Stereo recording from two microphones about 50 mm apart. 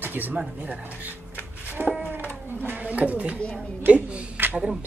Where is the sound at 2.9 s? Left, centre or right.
Right.